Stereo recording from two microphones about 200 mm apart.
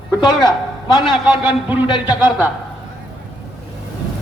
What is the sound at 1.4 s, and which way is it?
A man's voice, 10° right (ahead or behind).